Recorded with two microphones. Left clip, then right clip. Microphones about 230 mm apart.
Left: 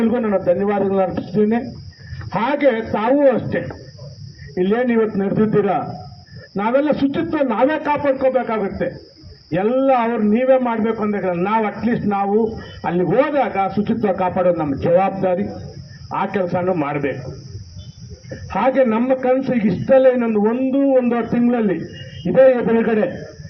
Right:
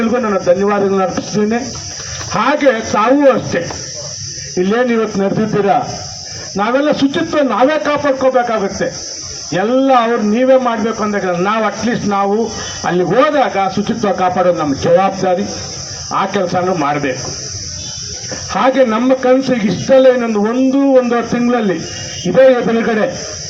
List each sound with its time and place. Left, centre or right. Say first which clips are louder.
0.0 s a man's voice: right 4 dB; right
4.6 s a man's voice: right 3 dB; right
18.5 s a man's voice: right 4 dB; right